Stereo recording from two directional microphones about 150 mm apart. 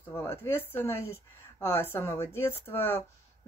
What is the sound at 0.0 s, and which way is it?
Speech, 15° left (ahead or behind).